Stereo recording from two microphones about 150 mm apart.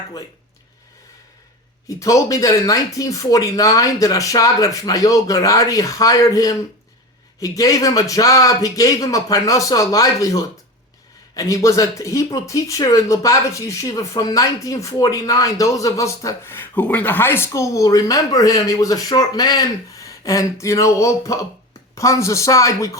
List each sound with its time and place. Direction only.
1.9 s speech: 20° left (ahead or behind)